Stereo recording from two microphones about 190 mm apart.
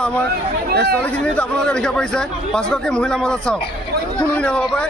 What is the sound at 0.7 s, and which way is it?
Speech, 60° right (ahead or behind).